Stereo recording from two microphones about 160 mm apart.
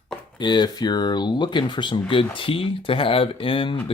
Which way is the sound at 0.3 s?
30° left (ahead or behind).